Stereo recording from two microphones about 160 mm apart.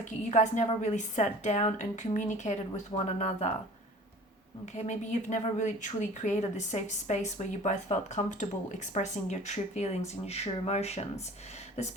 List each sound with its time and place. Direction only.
0.0 s speech: 50° left (ahead or behind)
4.6 s speech: 50° left (ahead or behind)